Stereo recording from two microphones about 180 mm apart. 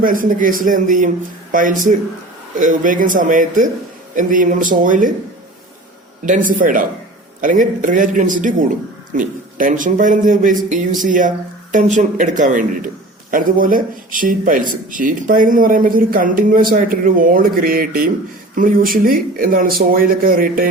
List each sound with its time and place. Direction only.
0.0 s speech: 50° right (ahead or behind)
6.2 s speech: 45° right (ahead or behind)